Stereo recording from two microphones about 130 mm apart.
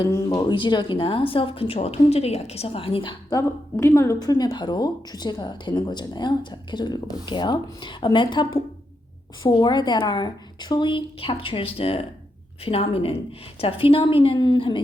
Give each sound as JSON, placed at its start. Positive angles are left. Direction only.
{"t": 0.0, "sound": "speech", "side_deg": 30}
{"t": 3.3, "sound": "a woman's voice", "side_deg": 20}